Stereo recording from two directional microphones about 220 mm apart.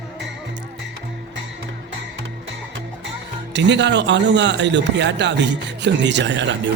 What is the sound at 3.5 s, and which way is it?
Speech, 55° right (ahead or behind).